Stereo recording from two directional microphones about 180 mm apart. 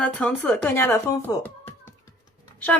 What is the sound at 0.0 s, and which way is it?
A woman's voice, 5° left (ahead or behind).